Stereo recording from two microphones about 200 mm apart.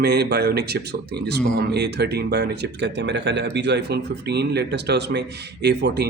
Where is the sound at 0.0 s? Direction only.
55° right (ahead or behind).